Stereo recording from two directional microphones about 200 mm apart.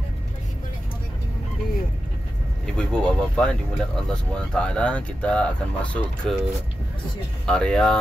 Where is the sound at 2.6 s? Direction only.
5° left (ahead or behind).